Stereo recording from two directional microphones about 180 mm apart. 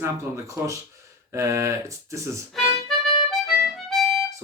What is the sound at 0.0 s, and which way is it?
Speech, 15° right (ahead or behind).